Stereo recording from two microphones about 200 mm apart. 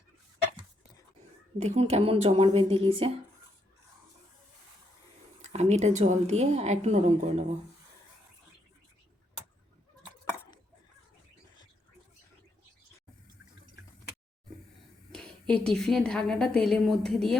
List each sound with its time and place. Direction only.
1.5 s a woman's voice: 35° right (ahead or behind)
5.5 s a woman's voice: 35° right (ahead or behind)
15.1 s a woman's voice: 5° left (ahead or behind)